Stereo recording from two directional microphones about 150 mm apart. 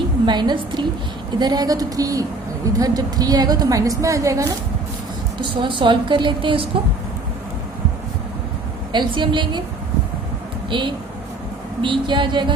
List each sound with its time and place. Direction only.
0.3 s a woman's voice: 30° right (ahead or behind)
5.4 s a woman's voice: 30° right (ahead or behind)
8.9 s a woman's voice: 30° right (ahead or behind)
10.7 s a woman's voice: 30° right (ahead or behind)